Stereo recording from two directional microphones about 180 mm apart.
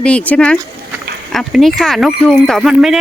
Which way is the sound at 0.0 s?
5° left (ahead or behind).